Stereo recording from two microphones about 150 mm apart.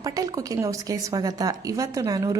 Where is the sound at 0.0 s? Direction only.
25° right (ahead or behind).